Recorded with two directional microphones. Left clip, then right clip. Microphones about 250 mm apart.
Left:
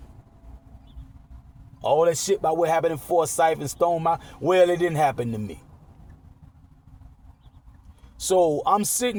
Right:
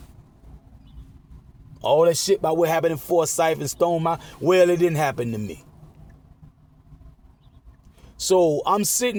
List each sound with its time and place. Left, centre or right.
1.8 s speech: right
8.2 s speech: right